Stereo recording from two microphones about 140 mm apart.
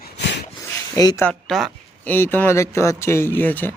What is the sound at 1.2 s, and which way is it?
Speech, 5° left (ahead or behind).